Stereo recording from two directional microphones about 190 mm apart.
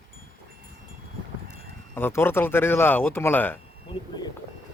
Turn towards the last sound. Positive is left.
turn(degrees=20)  # may be behind; listen again after turning